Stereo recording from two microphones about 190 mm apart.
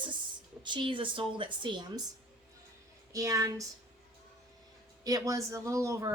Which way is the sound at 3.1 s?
15° right (ahead or behind).